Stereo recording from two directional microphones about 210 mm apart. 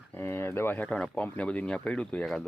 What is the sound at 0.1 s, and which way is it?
Speech, 10° left (ahead or behind).